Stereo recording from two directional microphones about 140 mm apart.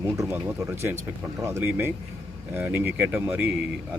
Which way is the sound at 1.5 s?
20° right (ahead or behind).